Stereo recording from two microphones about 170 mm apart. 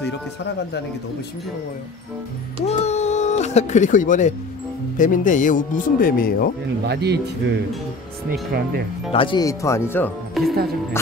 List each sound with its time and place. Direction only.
2.6 s a sound: 40° left (ahead or behind)
4.9 s speech: 50° left (ahead or behind)
6.9 s speech: 80° right
9.1 s speech: 30° left (ahead or behind); by 10.1 s 10° left (ahead or behind)
10.4 s speech: centre (ahead or behind)